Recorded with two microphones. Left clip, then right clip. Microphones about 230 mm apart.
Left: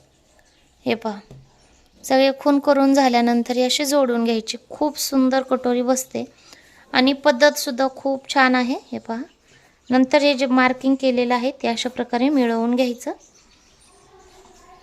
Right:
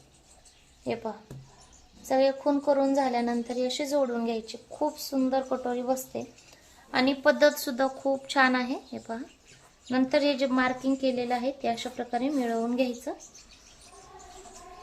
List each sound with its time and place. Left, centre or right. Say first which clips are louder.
2.0 s a woman's voice: left 8 dB; left